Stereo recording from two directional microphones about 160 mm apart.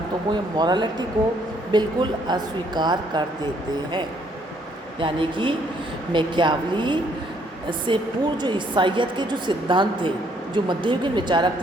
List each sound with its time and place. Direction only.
0.5 s a woman's voice: 25° right (ahead or behind)
4.9 s a woman's voice: 30° right (ahead or behind)